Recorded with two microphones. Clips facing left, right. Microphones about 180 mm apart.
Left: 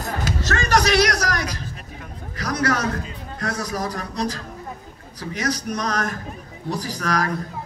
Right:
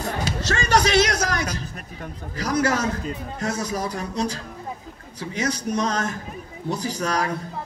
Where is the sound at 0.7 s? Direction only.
25° right (ahead or behind).